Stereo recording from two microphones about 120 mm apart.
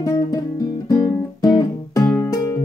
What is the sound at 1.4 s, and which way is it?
Music, 30° left (ahead or behind).